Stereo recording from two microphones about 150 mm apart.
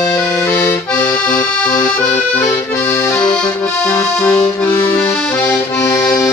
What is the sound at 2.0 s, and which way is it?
Accordion, 20° left (ahead or behind).